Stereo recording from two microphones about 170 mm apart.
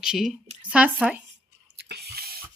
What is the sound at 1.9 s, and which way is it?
Drip, 65° right (ahead or behind).